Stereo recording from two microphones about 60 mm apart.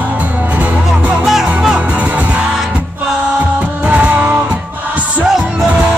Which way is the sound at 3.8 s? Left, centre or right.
Right.